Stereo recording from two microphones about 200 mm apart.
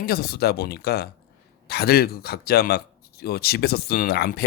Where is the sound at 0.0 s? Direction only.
50° left (ahead or behind).